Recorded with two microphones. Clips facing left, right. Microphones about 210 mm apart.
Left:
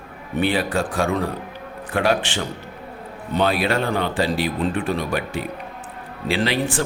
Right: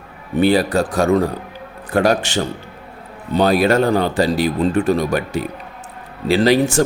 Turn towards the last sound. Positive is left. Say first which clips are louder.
# right 8 dB
turn(degrees=-40)  # may be behind; listen again after turning